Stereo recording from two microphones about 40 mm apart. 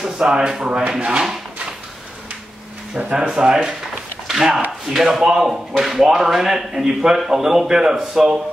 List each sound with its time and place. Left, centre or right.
0.0 s speech: centre
3.0 s speech: right
4.3 s a sound: centre
4.8 s speech: centre